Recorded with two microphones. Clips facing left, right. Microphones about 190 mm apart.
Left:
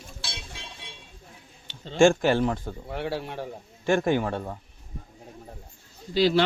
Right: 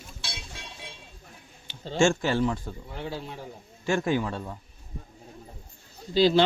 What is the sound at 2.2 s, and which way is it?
A man's voice, 50° left (ahead or behind).